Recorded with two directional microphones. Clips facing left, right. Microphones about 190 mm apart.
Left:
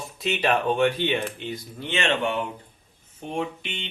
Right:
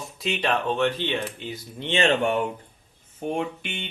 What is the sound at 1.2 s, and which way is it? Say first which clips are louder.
Speech: left 2 dB; centre (ahead or behind).